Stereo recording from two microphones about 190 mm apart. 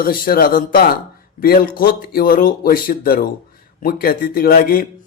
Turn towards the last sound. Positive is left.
turn(degrees=50)  # may be behind; listen again after turning